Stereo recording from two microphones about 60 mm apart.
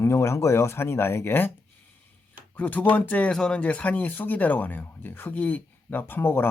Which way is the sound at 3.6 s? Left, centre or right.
Left.